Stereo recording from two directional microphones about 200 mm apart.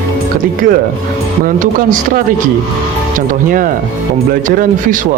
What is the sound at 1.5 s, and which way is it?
A man's voice, 40° right (ahead or behind).